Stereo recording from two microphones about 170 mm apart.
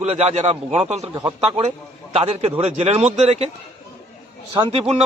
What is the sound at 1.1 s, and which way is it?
Speech, 20° right (ahead or behind).